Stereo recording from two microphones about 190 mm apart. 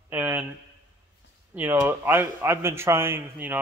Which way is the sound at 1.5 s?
10° right (ahead or behind).